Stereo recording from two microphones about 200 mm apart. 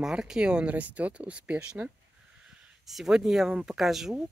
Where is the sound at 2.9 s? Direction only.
Centre (ahead or behind).